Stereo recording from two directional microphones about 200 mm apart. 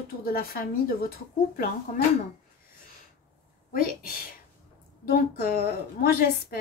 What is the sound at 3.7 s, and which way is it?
Speech, 45° left (ahead or behind).